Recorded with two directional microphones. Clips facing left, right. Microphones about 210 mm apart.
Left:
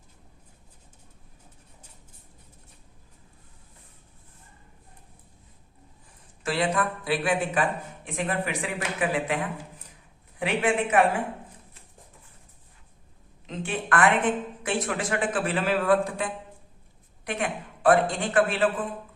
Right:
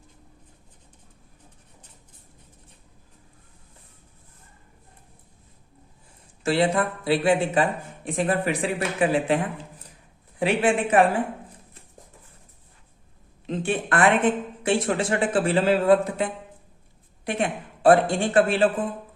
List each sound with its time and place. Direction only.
6.4 s speech: 25° right (ahead or behind)
10.4 s a woman's voice: 30° right (ahead or behind)
13.5 s speech: 30° right (ahead or behind)